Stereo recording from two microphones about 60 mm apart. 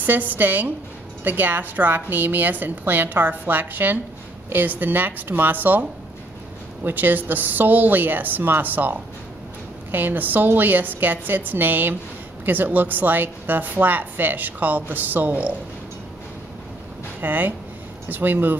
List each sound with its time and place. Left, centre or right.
0.0 s a woman's voice: right
17.2 s a woman's voice: right